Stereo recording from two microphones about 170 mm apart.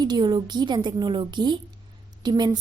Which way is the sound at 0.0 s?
25° right (ahead or behind).